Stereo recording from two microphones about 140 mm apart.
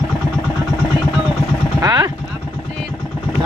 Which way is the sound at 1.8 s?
30° right (ahead or behind).